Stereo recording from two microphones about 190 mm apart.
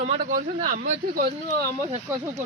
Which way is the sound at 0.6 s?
45° right (ahead or behind).